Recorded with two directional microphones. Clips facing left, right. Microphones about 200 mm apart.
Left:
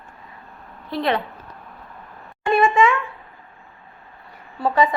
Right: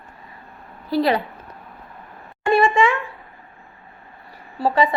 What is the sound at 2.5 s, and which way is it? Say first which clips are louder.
Speech: even; 30° right (ahead or behind).